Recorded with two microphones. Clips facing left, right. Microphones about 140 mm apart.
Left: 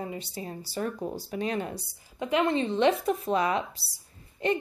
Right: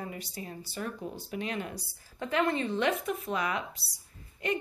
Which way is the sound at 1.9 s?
15° left (ahead or behind).